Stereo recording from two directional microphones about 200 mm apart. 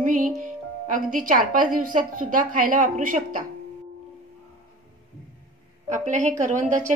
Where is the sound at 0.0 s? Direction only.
40° right (ahead or behind).